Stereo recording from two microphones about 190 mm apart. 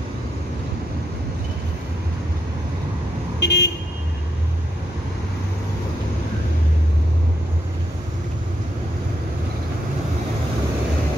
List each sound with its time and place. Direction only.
3.3 s vehicle: 60° left (ahead or behind)